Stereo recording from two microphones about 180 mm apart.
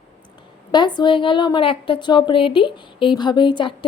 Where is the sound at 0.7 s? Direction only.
25° left (ahead or behind).